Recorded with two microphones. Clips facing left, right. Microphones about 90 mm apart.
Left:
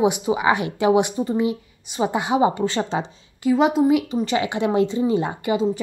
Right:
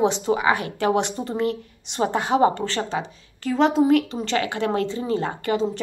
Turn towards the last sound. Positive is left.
turn(degrees=10)  # may be behind; listen again after turning